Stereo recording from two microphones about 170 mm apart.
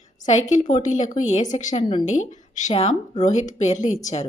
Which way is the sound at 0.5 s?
45° left (ahead or behind).